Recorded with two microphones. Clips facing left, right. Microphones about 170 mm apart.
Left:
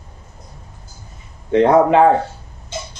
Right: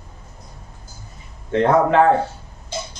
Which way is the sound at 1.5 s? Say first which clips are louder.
Left 4 dB; 15° left (ahead or behind).